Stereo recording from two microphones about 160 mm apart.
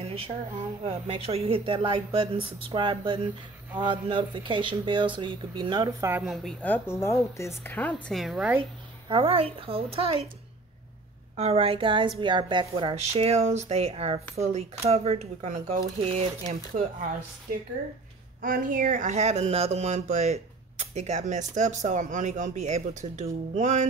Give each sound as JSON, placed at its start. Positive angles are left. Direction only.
{"t": 0.8, "sound": "a woman's voice", "side_deg": -35}
{"t": 6.2, "sound": "a woman's voice", "side_deg": 0}
{"t": 9.1, "sound": "a woman's voice", "side_deg": -35}
{"t": 11.3, "sound": "a woman's voice", "side_deg": -40}
{"t": 18.4, "sound": "speech", "side_deg": -60}